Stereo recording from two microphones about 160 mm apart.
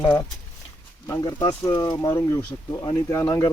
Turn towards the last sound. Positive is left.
turn(degrees=20)  # may be behind; listen again after turning